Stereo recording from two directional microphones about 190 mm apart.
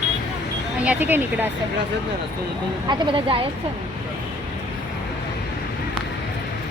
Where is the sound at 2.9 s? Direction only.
25° right (ahead or behind).